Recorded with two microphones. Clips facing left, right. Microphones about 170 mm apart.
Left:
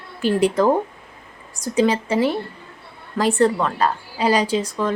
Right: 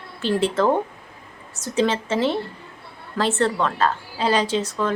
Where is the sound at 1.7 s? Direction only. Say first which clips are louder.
Left 3 dB; 10° left (ahead or behind).